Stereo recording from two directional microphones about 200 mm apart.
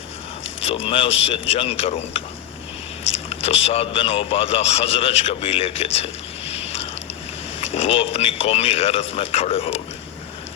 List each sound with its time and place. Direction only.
0.6 s speech: 30° left (ahead or behind)
3.2 s speech: 30° left (ahead or behind)
7.6 s speech: 30° left (ahead or behind)